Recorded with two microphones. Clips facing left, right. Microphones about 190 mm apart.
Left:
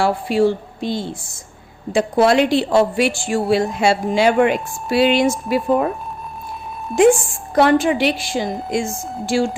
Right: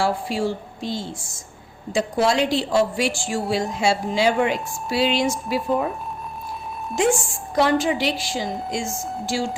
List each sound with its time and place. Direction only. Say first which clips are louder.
0.0 s a woman's voice: left 6 dB; 60° left (ahead or behind)
6.9 s a woman's voice: left 8 dB; 55° left (ahead or behind)